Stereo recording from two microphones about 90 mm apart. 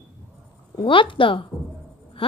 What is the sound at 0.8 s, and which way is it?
Speech, 70° left (ahead or behind).